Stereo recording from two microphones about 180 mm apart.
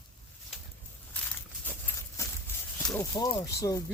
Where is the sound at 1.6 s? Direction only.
10° left (ahead or behind).